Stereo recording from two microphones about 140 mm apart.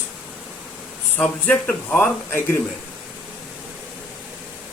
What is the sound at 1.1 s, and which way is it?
Speech, 10° left (ahead or behind).